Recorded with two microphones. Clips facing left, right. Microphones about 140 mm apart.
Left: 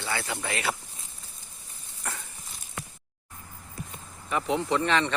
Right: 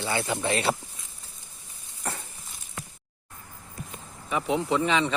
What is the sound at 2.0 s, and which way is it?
Stir, 30° right (ahead or behind).